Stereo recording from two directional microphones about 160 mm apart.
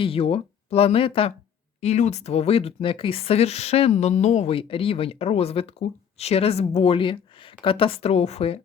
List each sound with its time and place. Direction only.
0.0 s speech: 35° left (ahead or behind)